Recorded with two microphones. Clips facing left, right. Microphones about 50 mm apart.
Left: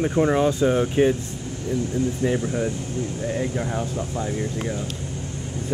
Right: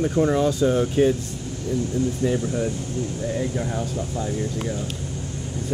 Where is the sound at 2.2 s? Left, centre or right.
Left.